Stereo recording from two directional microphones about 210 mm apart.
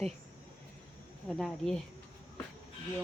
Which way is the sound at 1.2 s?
Centre (ahead or behind).